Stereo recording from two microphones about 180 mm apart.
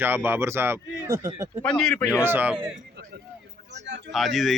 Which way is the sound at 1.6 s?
5° left (ahead or behind).